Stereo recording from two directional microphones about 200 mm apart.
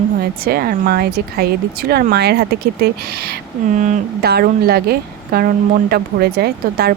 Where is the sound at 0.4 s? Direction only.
50° right (ahead or behind).